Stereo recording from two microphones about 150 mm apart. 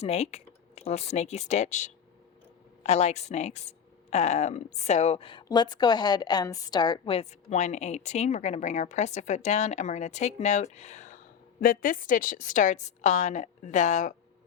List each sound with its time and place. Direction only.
0.0 s a woman's voice: 45° left (ahead or behind)
11.6 s a woman's voice: 70° left (ahead or behind)